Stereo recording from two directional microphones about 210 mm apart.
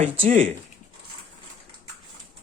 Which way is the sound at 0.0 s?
35° right (ahead or behind).